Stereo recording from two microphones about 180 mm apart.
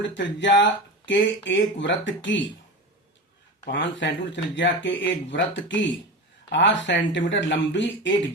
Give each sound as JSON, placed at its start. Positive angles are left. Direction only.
{"t": 0.1, "sound": "speech", "side_deg": 90}
{"t": 3.7, "sound": "speech", "side_deg": 80}